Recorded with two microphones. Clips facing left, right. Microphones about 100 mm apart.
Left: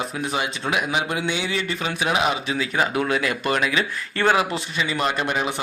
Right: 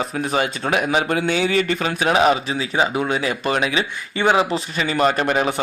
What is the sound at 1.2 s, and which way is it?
Speech, 45° right (ahead or behind).